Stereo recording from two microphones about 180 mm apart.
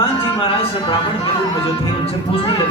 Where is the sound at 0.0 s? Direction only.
30° left (ahead or behind).